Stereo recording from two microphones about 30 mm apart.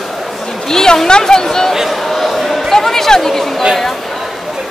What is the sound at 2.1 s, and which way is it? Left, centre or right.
Chatter, centre.